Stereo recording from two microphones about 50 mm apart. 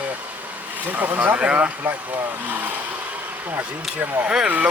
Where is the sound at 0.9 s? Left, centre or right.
Right.